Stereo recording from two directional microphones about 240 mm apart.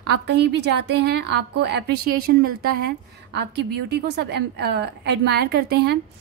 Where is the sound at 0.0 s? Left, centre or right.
Right.